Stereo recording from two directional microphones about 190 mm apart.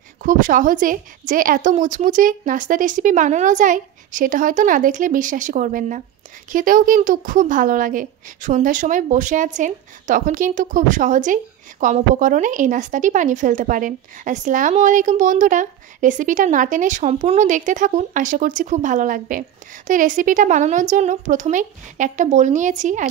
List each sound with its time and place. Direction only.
0.2 s a woman's voice: 45° right (ahead or behind)